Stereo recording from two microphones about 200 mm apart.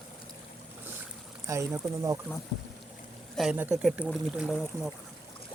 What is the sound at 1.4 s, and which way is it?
Speech, 15° right (ahead or behind).